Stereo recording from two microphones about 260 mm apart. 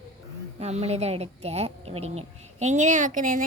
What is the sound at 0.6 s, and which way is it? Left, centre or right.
Speech, right.